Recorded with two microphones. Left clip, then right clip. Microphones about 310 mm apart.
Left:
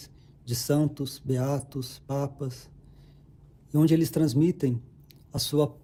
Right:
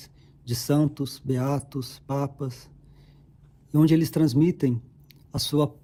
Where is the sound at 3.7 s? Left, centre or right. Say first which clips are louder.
Right 2 dB; right.